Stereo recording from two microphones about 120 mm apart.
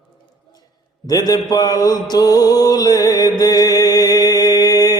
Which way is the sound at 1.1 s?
35° left (ahead or behind).